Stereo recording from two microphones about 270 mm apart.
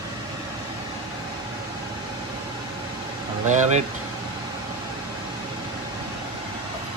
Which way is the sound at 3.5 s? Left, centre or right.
Right.